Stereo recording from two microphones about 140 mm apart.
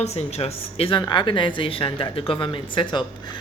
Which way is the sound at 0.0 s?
50° left (ahead or behind).